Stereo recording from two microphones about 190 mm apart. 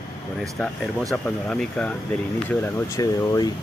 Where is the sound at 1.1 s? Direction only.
5° left (ahead or behind).